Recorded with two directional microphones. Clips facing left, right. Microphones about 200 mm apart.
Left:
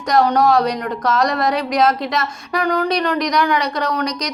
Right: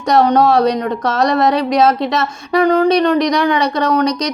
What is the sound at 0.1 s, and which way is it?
A woman's voice, 25° right (ahead or behind).